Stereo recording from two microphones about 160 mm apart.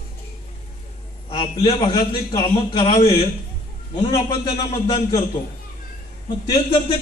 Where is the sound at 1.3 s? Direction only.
35° left (ahead or behind).